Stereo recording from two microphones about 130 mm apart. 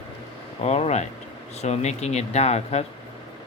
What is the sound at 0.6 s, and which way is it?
Speech, 55° left (ahead or behind).